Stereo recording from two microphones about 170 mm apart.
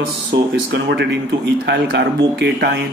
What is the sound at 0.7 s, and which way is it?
Speech, 90° right.